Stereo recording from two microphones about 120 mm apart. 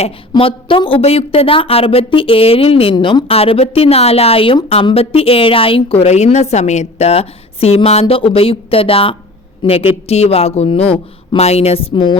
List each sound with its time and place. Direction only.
0.0 s speech: 50° left (ahead or behind)
2.9 s speech: 40° left (ahead or behind)